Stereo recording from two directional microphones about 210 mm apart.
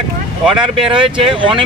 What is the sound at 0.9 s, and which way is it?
Speech, 25° right (ahead or behind).